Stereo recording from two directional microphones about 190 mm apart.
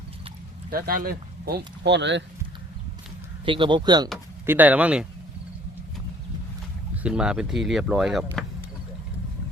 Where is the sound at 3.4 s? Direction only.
25° right (ahead or behind).